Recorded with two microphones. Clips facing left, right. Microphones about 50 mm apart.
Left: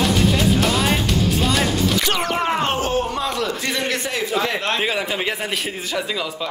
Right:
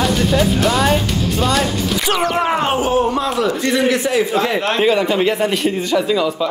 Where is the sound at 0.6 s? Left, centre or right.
Centre.